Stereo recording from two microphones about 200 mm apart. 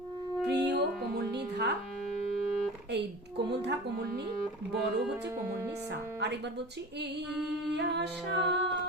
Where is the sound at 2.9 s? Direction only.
55° right (ahead or behind).